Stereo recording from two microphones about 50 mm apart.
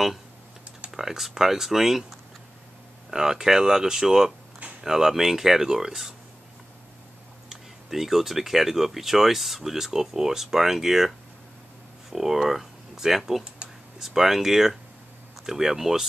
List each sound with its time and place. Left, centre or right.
0.9 s speech: centre
7.4 s speech: centre
13.4 s computer keyboard: right
14.0 s speech: centre